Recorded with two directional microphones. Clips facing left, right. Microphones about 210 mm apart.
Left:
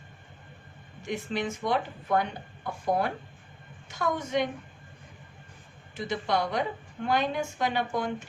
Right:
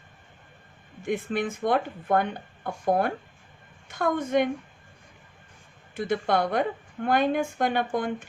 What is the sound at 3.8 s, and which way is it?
Speech, 55° right (ahead or behind).